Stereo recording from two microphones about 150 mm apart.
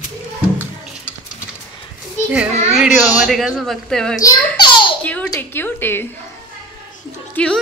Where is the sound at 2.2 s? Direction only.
5° right (ahead or behind).